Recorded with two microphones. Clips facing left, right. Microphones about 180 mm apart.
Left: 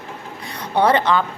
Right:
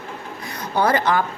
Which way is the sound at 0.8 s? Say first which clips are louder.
Left 2 dB; 25° left (ahead or behind).